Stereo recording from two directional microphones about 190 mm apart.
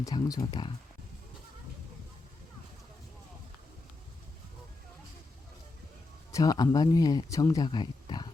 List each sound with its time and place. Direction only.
0.0 s speech: 20° left (ahead or behind)
6.3 s speech: 20° left (ahead or behind)